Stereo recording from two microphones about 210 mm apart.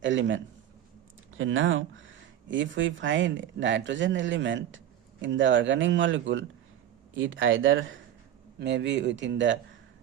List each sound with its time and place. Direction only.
0.0 s speech: 60° right (ahead or behind)
8.5 s speech: 55° right (ahead or behind)